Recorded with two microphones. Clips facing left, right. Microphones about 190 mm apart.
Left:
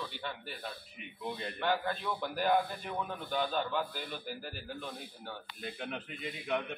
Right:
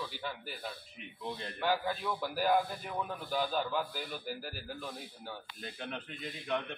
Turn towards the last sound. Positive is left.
turn(degrees=5)  # may be behind; listen again after turning